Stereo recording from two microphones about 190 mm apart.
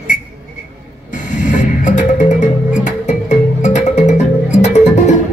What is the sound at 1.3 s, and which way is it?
Music, 40° left (ahead or behind).